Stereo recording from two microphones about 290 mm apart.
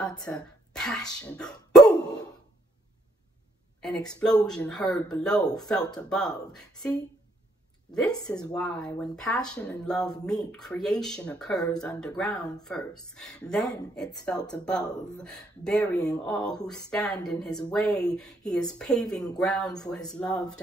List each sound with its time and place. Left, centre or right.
0.3 s speech: centre
3.8 s speech: centre
8.5 s speech: centre